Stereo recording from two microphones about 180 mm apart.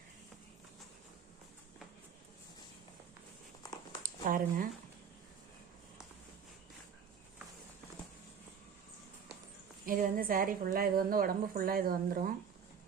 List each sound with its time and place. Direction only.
4.0 s speech: 50° right (ahead or behind)
9.8 s a woman's voice: 50° right (ahead or behind)